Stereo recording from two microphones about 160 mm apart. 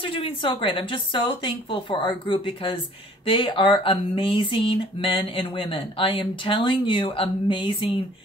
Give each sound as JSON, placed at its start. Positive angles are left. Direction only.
{"t": 0.0, "sound": "speech", "side_deg": 35}